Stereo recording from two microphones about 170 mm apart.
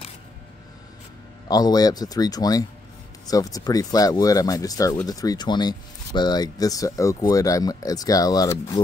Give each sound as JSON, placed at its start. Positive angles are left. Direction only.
{"t": 1.5, "sound": "speech", "side_deg": 20}